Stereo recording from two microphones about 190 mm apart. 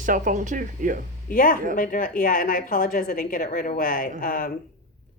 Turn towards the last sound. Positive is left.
turn(degrees=45)  # may be behind; listen again after turning